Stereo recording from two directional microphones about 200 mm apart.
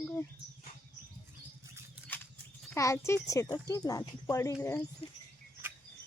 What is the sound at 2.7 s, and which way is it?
Speech, 15° left (ahead or behind).